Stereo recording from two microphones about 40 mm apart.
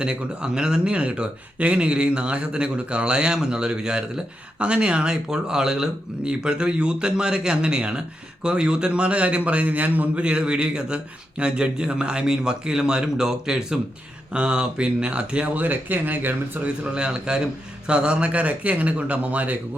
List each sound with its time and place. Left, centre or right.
0.0 s a man's voice: right
10.2 s speech: right
15.6 s speech: right
16.6 s a man's voice: right